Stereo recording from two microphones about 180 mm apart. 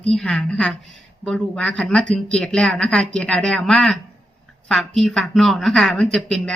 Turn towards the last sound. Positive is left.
turn(degrees=5)  # may be behind; listen again after turning